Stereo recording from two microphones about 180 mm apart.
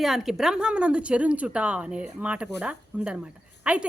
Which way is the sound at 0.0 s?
Centre (ahead or behind).